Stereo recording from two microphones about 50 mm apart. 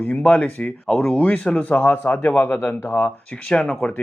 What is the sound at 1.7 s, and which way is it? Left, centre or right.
Speech, left.